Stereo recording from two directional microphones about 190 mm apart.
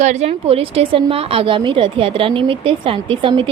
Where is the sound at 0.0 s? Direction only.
35° right (ahead or behind).